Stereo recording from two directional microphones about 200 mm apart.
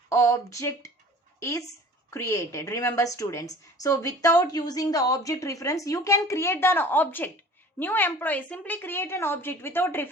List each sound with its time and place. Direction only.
0.1 s a woman's voice: 15° left (ahead or behind)